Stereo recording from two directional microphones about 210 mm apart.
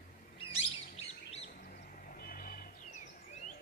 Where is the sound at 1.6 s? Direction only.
45° left (ahead or behind).